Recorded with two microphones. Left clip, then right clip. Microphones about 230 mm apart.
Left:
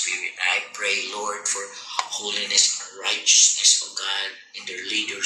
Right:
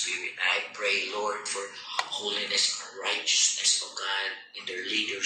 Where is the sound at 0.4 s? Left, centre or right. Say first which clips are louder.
Left 3 dB; left.